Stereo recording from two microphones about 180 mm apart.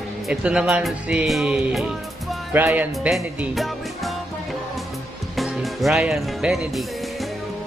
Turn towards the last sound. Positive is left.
turn(degrees=0)  # may be behind; listen again after turning